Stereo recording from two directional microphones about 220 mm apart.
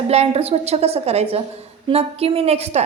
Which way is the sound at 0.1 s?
30° right (ahead or behind).